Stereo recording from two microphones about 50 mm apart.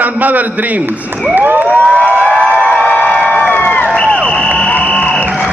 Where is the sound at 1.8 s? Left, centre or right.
Left.